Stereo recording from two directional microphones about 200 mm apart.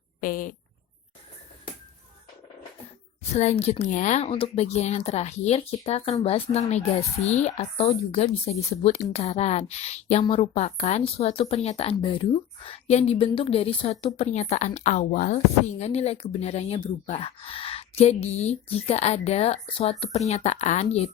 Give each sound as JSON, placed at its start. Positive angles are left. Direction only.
{"t": 0.2, "sound": "speech", "side_deg": 45}
{"t": 3.3, "sound": "speech", "side_deg": 35}